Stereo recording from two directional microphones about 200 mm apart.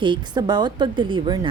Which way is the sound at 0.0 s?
20° right (ahead or behind).